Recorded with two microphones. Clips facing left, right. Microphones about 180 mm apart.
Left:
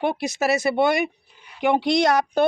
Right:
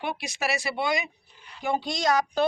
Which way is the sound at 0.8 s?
60° left (ahead or behind).